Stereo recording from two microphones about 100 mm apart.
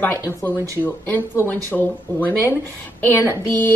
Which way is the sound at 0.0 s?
20° left (ahead or behind).